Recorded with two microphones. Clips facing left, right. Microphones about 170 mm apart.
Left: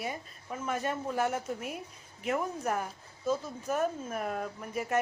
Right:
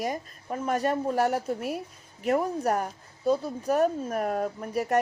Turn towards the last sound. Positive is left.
turn(degrees=-40)  # may be behind; listen again after turning